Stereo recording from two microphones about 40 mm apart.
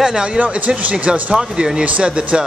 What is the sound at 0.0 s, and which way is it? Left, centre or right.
Speech, right.